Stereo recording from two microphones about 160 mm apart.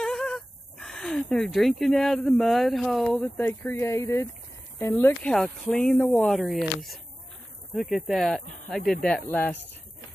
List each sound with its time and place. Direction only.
0.0 s speech: 5° left (ahead or behind)
3.8 s speech: 20° left (ahead or behind); by 6.7 s centre (ahead or behind)
7.7 s speech: centre (ahead or behind)